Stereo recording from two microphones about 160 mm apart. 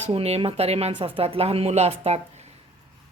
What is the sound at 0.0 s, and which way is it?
A man's voice, 40° right (ahead or behind).